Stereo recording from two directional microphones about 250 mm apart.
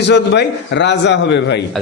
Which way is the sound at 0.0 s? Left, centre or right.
Left.